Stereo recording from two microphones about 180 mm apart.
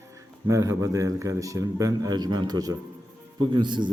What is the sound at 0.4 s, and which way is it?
A man's voice, 15° right (ahead or behind).